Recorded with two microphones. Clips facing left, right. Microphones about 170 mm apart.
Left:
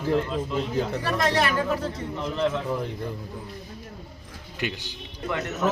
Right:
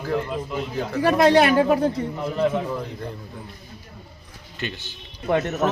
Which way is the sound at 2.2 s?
10° right (ahead or behind).